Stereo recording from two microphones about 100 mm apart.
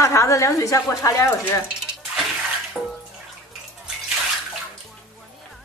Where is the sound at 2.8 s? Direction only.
10° right (ahead or behind).